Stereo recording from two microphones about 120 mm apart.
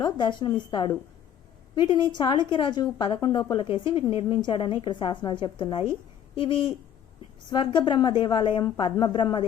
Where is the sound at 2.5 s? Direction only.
40° left (ahead or behind).